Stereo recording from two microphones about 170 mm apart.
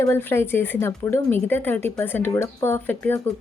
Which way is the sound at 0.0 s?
10° left (ahead or behind).